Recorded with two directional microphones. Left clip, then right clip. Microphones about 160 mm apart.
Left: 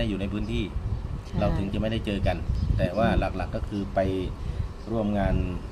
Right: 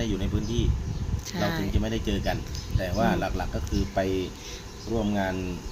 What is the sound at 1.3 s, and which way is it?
Speech, 5° left (ahead or behind).